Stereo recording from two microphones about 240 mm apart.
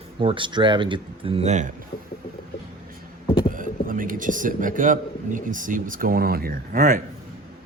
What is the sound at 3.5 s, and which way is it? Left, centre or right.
A man's voice, right.